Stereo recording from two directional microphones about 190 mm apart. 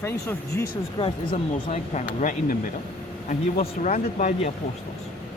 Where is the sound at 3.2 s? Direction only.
40° left (ahead or behind).